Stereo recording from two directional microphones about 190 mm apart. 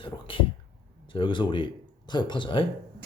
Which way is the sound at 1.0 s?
25° left (ahead or behind).